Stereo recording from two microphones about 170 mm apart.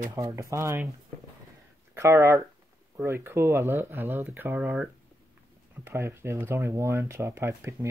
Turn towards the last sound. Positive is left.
turn(degrees=-15)  # may be behind; listen again after turning